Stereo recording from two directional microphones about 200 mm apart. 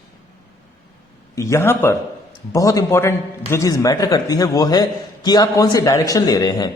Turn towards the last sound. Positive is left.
turn(degrees=20)  # may be behind; listen again after turning